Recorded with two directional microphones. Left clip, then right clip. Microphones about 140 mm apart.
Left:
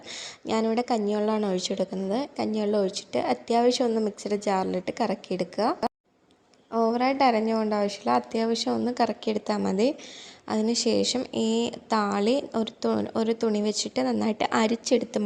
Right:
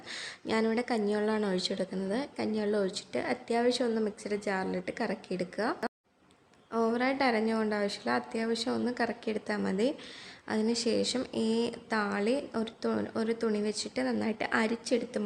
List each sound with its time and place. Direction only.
0.1 s a woman's voice: 20° left (ahead or behind); by 15.2 s 35° left (ahead or behind)